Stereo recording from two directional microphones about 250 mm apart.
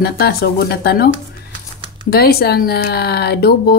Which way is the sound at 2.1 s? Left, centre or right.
Left.